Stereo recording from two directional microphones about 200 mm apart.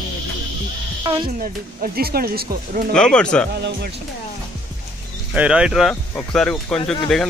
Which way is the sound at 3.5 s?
55° right (ahead or behind).